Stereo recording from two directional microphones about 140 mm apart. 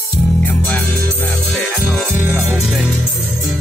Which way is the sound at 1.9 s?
15° right (ahead or behind).